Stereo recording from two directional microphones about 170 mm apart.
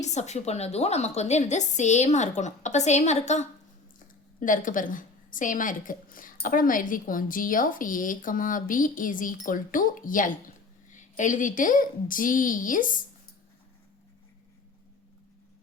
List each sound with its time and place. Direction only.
0.0 s a woman's voice: 40° left (ahead or behind)